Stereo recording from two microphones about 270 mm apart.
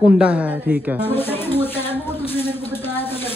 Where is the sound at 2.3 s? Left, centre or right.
Left.